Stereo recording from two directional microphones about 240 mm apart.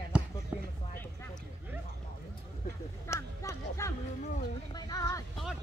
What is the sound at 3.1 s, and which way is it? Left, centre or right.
Music, centre.